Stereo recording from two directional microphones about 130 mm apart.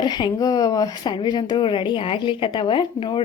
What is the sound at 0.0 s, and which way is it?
A woman's voice, 35° left (ahead or behind).